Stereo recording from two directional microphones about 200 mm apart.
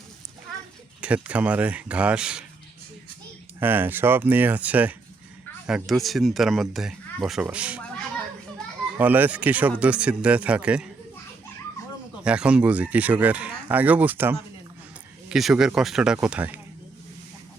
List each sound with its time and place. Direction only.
1.0 s speech: 5° right (ahead or behind)
3.6 s speech: 10° right (ahead or behind)
9.0 s speech: 10° right (ahead or behind)
12.2 s speech: 5° right (ahead or behind)